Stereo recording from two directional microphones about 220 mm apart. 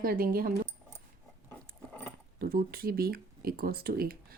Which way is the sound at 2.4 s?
45° right (ahead or behind).